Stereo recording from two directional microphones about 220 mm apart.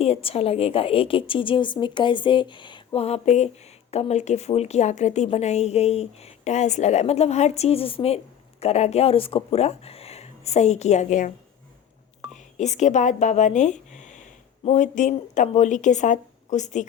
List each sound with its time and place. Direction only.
0.0 s a woman's voice: 25° left (ahead or behind)
12.5 s speech: 30° left (ahead or behind)